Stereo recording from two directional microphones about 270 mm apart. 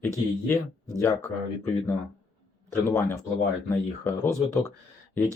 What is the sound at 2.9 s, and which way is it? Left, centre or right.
Speech, centre.